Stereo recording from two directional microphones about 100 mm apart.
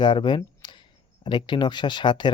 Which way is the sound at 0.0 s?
50° left (ahead or behind).